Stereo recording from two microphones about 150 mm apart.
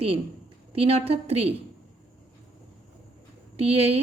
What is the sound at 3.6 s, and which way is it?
Speech, 45° right (ahead or behind).